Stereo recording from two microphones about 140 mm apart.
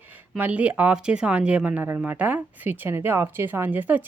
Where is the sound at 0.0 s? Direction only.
15° right (ahead or behind).